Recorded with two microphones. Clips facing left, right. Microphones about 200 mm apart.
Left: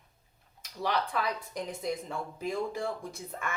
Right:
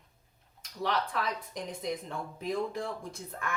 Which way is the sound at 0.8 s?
Centre (ahead or behind).